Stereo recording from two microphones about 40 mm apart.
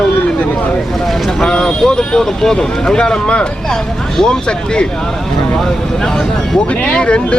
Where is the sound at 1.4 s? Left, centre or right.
Centre.